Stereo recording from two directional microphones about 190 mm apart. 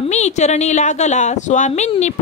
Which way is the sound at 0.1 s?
35° left (ahead or behind).